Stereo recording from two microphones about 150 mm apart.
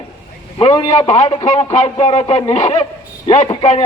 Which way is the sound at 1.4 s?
50° left (ahead or behind).